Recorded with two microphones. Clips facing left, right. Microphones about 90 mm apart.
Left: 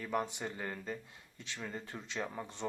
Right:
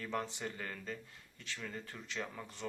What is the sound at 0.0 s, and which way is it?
Speech, 15° left (ahead or behind).